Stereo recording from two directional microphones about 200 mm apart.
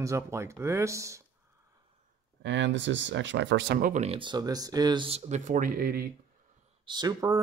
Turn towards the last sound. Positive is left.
turn(degrees=-20)  # may be behind; listen again after turning